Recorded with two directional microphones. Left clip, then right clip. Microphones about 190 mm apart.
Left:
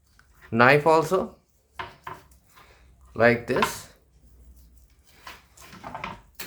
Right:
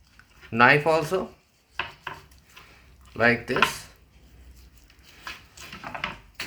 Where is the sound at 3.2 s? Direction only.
30° left (ahead or behind).